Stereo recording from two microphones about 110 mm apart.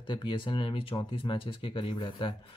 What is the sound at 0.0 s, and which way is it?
Speech, 45° left (ahead or behind).